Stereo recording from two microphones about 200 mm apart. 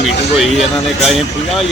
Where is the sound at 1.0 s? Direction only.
Centre (ahead or behind).